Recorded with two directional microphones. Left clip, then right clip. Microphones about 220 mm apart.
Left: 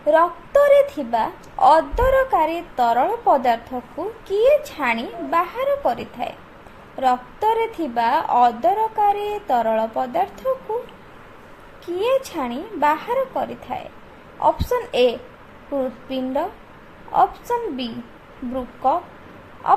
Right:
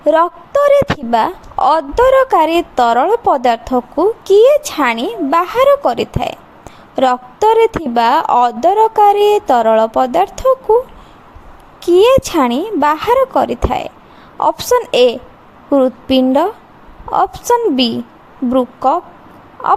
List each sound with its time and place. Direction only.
0.0 s a woman's voice: 45° right (ahead or behind)
6.9 s a sound: 45° right (ahead or behind)
7.4 s a woman's voice: 45° right (ahead or behind)
11.8 s a woman's voice: 45° right (ahead or behind)